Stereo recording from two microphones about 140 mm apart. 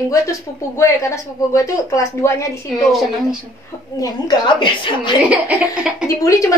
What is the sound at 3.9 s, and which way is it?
A woman's voice, 30° left (ahead or behind).